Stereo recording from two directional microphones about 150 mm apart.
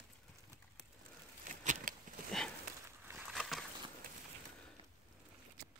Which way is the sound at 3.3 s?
Centre (ahead or behind).